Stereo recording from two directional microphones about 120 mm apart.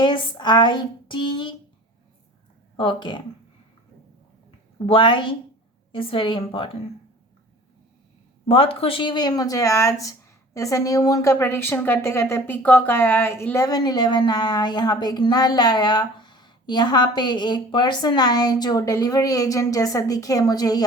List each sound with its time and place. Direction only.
0.0 s speech: 40° left (ahead or behind)
2.7 s speech: 45° left (ahead or behind)
4.9 s a woman's voice: 45° left (ahead or behind)
8.4 s speech: 50° left (ahead or behind); by 13.7 s 20° left (ahead or behind)
13.7 s speech: 35° left (ahead or behind)